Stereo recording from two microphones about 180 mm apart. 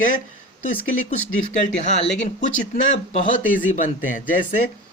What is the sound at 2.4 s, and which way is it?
Speech, 45° left (ahead or behind).